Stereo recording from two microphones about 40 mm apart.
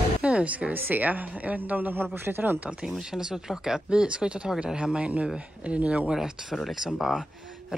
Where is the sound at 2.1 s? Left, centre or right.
Right.